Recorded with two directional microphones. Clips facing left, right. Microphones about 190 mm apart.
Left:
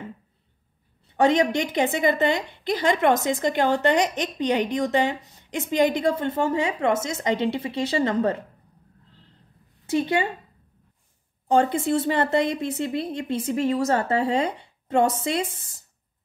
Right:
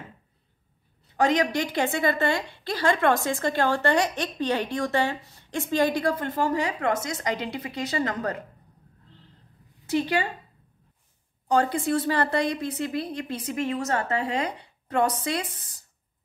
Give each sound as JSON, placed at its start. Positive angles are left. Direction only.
{"t": 1.1, "sound": "a woman's voice", "side_deg": 25}
{"t": 9.8, "sound": "a woman's voice", "side_deg": 25}
{"t": 11.4, "sound": "a woman's voice", "side_deg": 25}